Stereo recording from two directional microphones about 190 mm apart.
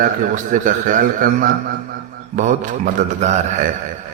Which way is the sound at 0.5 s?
45° right (ahead or behind).